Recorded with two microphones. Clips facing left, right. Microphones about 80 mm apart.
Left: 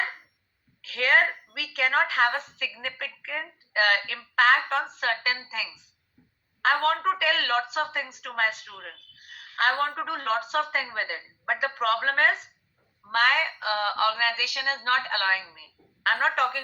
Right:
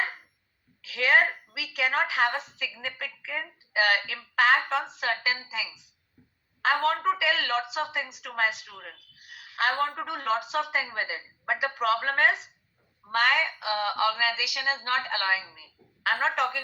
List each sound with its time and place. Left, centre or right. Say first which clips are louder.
0.8 s a woman's voice: even; left
6.2 s a sound: right 1 dB; centre
6.6 s a woman's voice: left 1 dB; left